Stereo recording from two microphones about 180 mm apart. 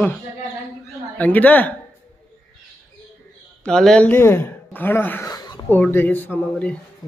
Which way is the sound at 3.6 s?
5° left (ahead or behind).